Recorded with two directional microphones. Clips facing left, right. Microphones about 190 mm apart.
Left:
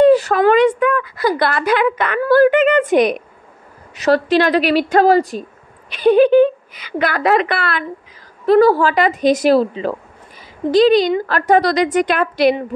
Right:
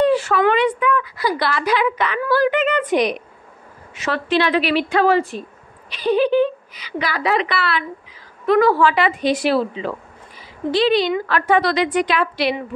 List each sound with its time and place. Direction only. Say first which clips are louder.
0.0 s a woman's voice: left 5 dB; 40° left (ahead or behind)
3.9 s speech: left 6 dB; 40° left (ahead or behind)
5.9 s a woman's voice: left 6 dB; 55° left (ahead or behind)
8.5 s a woman's voice: left 4 dB; 35° left (ahead or behind)